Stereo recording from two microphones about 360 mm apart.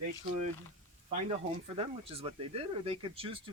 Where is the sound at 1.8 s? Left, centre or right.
Centre.